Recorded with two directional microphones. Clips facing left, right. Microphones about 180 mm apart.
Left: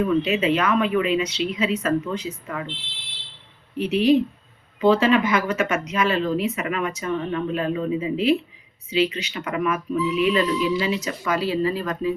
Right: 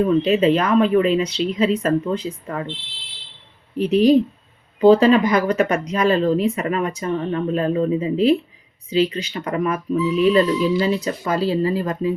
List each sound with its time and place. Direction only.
0.0 s speech: 35° right (ahead or behind)
3.8 s speech: 35° right (ahead or behind)